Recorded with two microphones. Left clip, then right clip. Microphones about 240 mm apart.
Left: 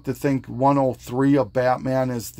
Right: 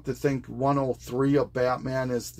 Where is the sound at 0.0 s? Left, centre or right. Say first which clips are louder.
Left 4 dB; left.